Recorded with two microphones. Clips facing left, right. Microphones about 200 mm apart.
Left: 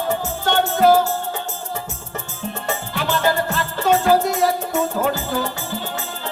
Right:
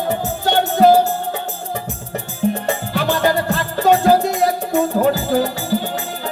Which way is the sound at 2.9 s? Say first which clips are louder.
Right 3 dB; 35° right (ahead or behind).